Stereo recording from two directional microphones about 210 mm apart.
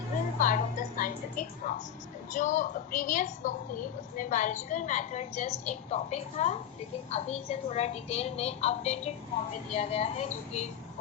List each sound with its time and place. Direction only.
0.3 s music: 40° left (ahead or behind)
2.3 s a woman's voice: 35° left (ahead or behind)